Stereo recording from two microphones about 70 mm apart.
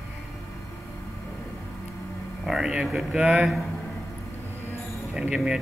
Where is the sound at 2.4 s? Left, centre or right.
Centre.